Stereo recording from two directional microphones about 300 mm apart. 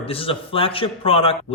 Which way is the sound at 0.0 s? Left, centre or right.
Centre.